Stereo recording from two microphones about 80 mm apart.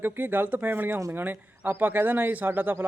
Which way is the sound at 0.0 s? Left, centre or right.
Right.